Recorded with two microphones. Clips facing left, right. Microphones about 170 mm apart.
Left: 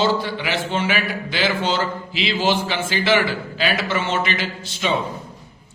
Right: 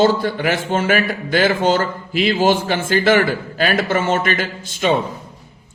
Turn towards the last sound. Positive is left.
turn(degrees=-50)  # may be behind; listen again after turning